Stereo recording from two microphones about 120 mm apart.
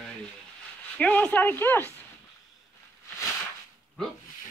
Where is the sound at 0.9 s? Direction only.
10° left (ahead or behind).